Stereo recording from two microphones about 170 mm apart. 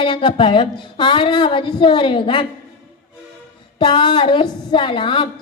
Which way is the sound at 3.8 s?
25° left (ahead or behind).